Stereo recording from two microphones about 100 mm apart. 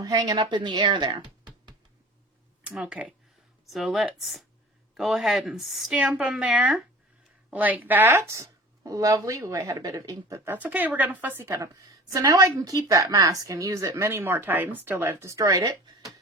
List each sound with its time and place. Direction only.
0.0 s speech: 40° right (ahead or behind)
2.6 s speech: 10° right (ahead or behind); by 10.6 s 30° right (ahead or behind)
10.6 s speech: 15° right (ahead or behind)
11.6 s speech: 35° right (ahead or behind)